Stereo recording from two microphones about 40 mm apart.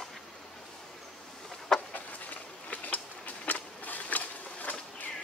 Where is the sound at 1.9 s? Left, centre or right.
Left.